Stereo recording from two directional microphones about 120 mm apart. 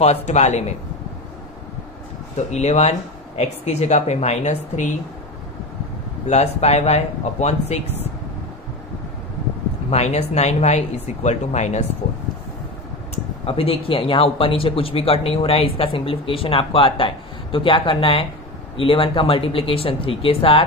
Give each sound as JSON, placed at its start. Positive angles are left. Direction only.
{"t": 0.0, "sound": "speech", "side_deg": 70}
{"t": 2.3, "sound": "speech", "side_deg": 65}
{"t": 6.2, "sound": "speech", "side_deg": 65}
{"t": 9.8, "sound": "speech", "side_deg": 65}
{"t": 13.1, "sound": "speech", "side_deg": 55}